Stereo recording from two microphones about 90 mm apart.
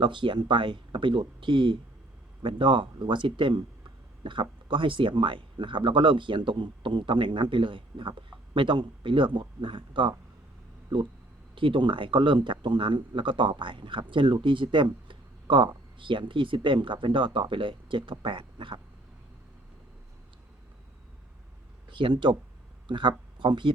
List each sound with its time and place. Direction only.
0.0 s speech: 65° right (ahead or behind)
11.5 s speech: 70° right (ahead or behind)
21.8 s speech: 65° right (ahead or behind)